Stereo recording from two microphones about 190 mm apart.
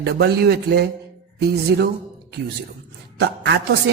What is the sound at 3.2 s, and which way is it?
Speech, 60° right (ahead or behind).